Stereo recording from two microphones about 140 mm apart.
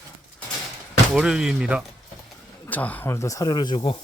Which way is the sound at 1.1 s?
5° right (ahead or behind).